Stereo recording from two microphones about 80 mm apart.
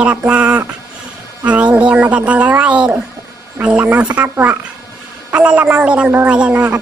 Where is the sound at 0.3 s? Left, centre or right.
Centre.